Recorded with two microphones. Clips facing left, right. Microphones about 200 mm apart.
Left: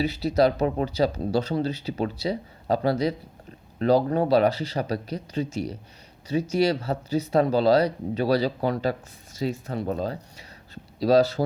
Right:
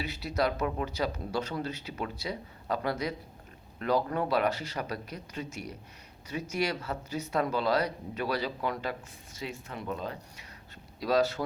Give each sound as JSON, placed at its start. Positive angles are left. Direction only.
{"t": 0.0, "sound": "speech", "side_deg": 35}